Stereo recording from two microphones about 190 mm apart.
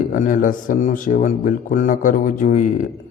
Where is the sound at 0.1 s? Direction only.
45° left (ahead or behind).